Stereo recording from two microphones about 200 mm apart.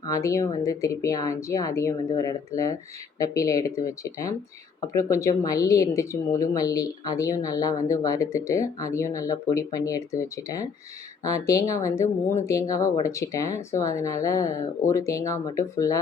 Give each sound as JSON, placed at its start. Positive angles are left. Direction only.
{"t": 0.1, "sound": "a woman's voice", "side_deg": 15}